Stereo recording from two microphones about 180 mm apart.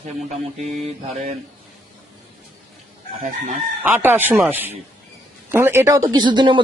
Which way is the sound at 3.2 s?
45° right (ahead or behind).